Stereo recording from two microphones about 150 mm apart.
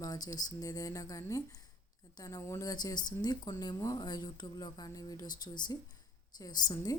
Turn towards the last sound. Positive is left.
turn(degrees=25)  # may be behind; listen again after turning